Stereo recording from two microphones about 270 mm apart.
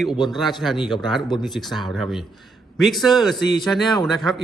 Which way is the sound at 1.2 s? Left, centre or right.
Centre.